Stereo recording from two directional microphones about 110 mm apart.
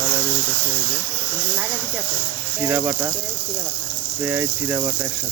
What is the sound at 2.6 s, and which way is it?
Speech, 20° right (ahead or behind).